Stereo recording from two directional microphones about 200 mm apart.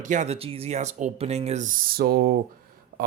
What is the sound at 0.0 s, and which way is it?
Speech, 35° right (ahead or behind).